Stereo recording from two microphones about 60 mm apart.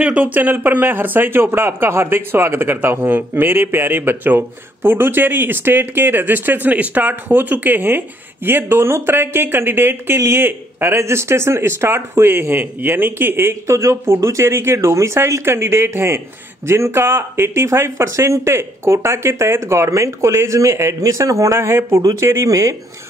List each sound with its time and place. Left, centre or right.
0.0 s speech: right
11.0 s speech: right
22.5 s speech: right